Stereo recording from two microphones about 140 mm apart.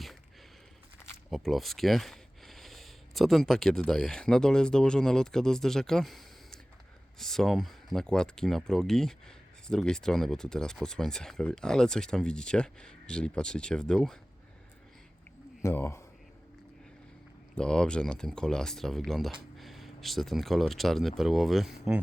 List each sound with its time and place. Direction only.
1.3 s speech: centre (ahead or behind)
15.6 s speech: 20° left (ahead or behind)
17.5 s speech: 5° left (ahead or behind)